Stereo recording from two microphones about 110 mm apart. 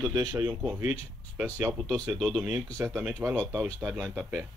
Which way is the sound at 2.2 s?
5° right (ahead or behind).